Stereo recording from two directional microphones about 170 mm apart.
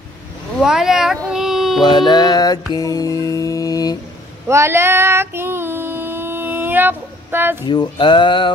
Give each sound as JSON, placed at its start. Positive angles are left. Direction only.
{"t": 0.6, "sound": "speech", "side_deg": 0}
{"t": 1.9, "sound": "music", "side_deg": 25}
{"t": 4.5, "sound": "female singing", "side_deg": -15}
{"t": 7.6, "sound": "music", "side_deg": 25}